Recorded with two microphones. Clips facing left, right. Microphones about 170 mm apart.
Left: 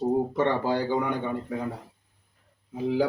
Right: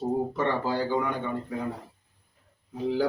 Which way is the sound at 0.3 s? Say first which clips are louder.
Left 2 dB; 15° left (ahead or behind).